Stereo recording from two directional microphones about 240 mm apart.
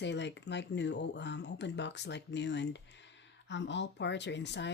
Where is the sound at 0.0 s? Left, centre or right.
Left.